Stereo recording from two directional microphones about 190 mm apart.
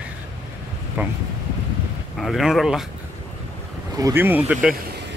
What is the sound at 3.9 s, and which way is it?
Speech, 15° right (ahead or behind).